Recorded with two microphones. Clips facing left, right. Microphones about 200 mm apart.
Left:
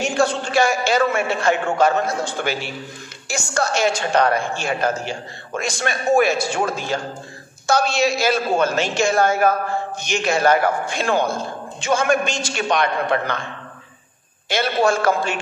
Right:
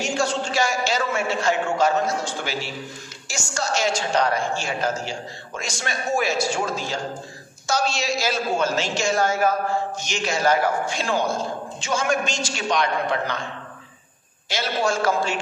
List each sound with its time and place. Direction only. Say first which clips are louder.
0.0 s a woman's voice: left 4 dB; 55° left (ahead or behind)
14.5 s a woman's voice: left 5 dB; 55° left (ahead or behind)